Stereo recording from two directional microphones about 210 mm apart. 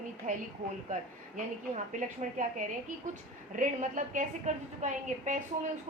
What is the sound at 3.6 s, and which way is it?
A woman's voice, 40° right (ahead or behind).